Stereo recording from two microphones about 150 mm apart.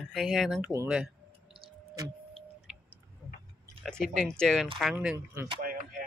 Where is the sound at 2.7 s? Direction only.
5° right (ahead or behind).